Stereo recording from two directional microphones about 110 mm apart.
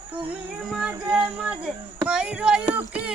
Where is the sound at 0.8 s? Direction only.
10° right (ahead or behind).